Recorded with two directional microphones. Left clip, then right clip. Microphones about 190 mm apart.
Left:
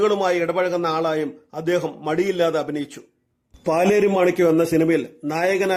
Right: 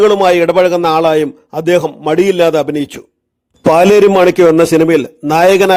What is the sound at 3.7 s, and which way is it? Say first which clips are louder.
Speech: right 11 dB; 55° right (ahead or behind).